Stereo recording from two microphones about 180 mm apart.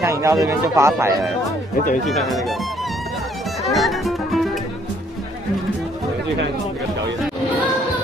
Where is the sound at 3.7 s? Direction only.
Centre (ahead or behind).